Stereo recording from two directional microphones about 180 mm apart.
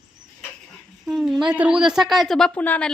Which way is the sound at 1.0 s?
Centre (ahead or behind).